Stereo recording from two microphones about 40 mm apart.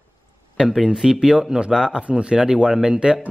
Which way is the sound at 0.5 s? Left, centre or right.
Centre.